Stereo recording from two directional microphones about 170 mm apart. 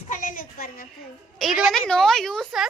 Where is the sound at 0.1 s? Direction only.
50° left (ahead or behind).